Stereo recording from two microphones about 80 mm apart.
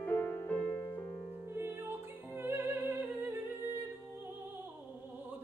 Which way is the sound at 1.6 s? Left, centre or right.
Right.